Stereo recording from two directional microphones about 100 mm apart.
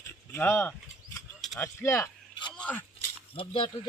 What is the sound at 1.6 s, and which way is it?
Speech, 25° left (ahead or behind).